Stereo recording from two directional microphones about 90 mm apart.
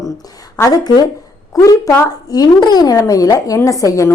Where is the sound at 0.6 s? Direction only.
45° left (ahead or behind).